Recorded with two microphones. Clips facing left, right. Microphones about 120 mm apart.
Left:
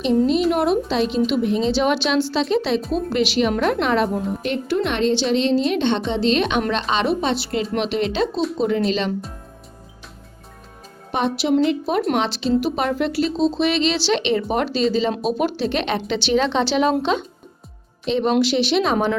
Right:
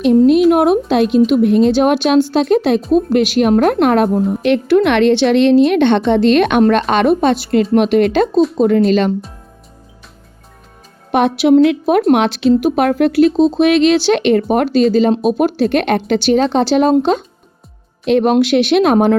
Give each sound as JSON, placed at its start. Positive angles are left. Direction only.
{"t": 0.5, "sound": "a woman's voice", "side_deg": -55}
{"t": 4.4, "sound": "a woman's voice", "side_deg": -75}
{"t": 11.1, "sound": "a woman's voice", "side_deg": -65}
{"t": 18.0, "sound": "a woman's voice", "side_deg": -60}